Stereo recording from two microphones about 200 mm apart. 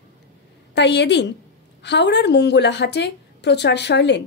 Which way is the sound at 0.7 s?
60° left (ahead or behind).